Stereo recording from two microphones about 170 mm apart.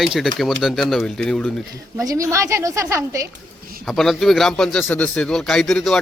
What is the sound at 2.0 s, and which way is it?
Speech, 20° right (ahead or behind).